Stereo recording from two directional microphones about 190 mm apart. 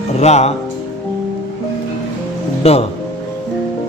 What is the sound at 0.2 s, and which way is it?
Speech, 35° left (ahead or behind).